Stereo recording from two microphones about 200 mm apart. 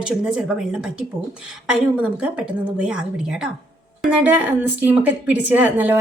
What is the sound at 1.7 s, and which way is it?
A woman's voice, 5° right (ahead or behind).